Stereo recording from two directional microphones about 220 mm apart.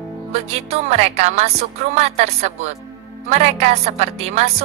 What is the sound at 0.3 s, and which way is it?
Speech, 30° right (ahead or behind).